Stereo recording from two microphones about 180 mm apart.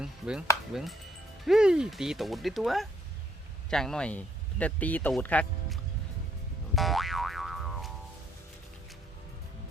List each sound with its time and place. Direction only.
0.0 s speech: 5° right (ahead or behind)
6.7 s boing: centre (ahead or behind)